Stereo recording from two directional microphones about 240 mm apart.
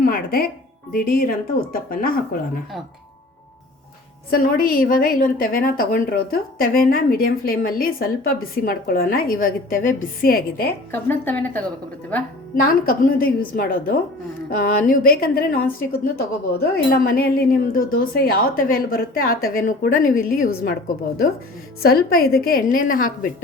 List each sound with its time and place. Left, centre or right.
0.0 s a woman's voice: left
4.3 s a woman's voice: left
10.9 s a woman's voice: centre
12.5 s a woman's voice: left
21.8 s a woman's voice: left